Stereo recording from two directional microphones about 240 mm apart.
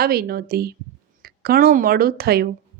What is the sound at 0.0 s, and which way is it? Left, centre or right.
A woman's voice, right.